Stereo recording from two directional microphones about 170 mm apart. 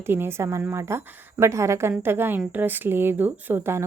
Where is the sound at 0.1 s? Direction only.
15° right (ahead or behind).